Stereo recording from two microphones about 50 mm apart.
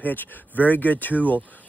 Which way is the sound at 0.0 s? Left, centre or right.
Left.